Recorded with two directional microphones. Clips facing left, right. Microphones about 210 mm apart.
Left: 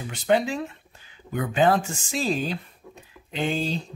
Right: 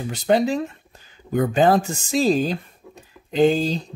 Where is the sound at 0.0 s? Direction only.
40° right (ahead or behind).